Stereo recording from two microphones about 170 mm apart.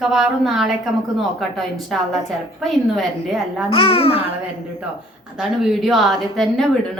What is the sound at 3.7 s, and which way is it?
Speech, 30° left (ahead or behind).